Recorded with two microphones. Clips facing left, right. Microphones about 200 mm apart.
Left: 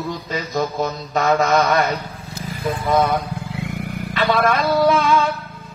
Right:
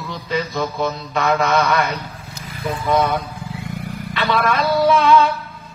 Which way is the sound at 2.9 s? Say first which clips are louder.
Even; 45° left (ahead or behind).